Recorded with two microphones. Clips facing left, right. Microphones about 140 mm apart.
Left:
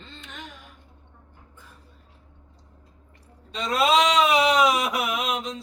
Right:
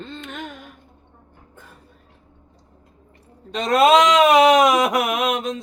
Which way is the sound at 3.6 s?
55° right (ahead or behind).